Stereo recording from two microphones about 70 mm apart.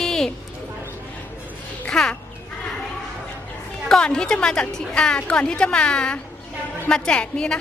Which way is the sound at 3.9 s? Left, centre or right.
Centre.